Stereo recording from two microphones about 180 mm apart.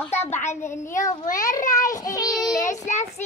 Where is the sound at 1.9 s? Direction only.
20° left (ahead or behind).